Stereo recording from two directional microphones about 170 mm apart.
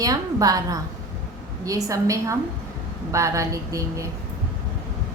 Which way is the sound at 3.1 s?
20° right (ahead or behind).